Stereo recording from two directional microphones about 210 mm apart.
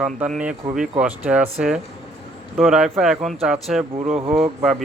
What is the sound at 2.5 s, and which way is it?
Speech, centre (ahead or behind).